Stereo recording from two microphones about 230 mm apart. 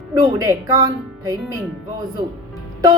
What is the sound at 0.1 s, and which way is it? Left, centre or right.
Speech, centre.